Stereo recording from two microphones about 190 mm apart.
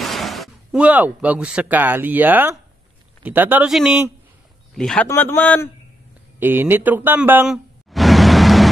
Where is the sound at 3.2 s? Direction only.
10° right (ahead or behind); by 5.6 s 10° left (ahead or behind).